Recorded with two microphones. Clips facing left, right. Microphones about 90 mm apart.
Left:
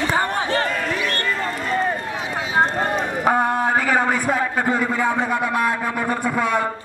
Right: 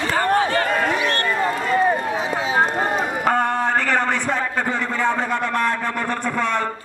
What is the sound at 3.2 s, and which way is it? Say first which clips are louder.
A man's voice: left 2 dB; 10° left (ahead or behind).